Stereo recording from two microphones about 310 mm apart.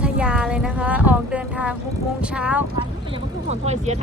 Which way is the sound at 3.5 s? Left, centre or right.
Right.